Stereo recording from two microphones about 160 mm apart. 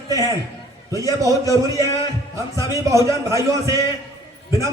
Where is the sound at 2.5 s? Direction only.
20° right (ahead or behind).